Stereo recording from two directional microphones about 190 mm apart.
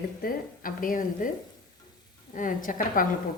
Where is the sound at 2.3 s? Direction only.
45° left (ahead or behind).